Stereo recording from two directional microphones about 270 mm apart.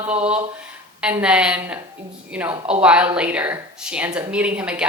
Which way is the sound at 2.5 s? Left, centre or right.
Right.